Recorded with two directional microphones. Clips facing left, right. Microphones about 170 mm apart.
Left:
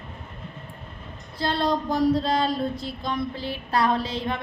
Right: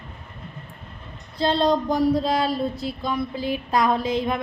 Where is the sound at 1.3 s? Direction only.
20° right (ahead or behind).